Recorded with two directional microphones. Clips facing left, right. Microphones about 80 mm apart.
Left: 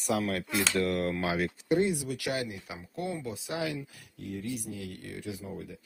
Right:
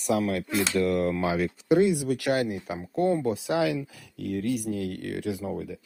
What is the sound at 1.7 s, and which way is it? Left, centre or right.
Speech, right.